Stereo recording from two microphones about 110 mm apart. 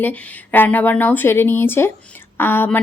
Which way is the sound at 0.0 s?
15° left (ahead or behind).